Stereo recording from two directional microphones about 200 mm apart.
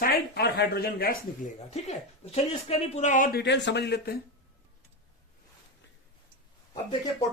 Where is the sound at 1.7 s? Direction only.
30° left (ahead or behind).